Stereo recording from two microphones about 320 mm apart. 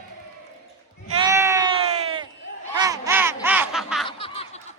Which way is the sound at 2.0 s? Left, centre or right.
Centre.